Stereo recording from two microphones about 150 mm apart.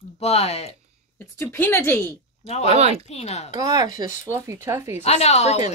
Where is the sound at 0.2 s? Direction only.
45° left (ahead or behind).